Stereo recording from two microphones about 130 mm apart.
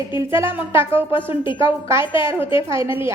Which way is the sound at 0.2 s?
20° right (ahead or behind).